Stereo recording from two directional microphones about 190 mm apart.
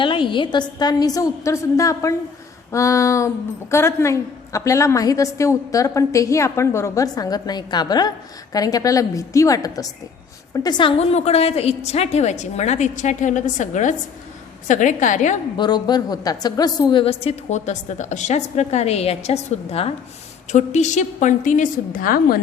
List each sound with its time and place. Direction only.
0.0 s a woman's voice: 25° left (ahead or behind)
15.5 s a woman's voice: 20° left (ahead or behind); by 22.4 s 50° left (ahead or behind)